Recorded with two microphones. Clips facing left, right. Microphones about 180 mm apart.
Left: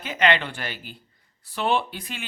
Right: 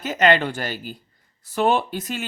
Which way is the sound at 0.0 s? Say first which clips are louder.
Right 4 dB; 40° right (ahead or behind).